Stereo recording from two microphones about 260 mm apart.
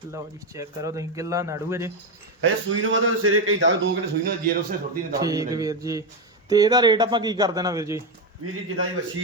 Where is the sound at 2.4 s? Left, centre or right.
Right.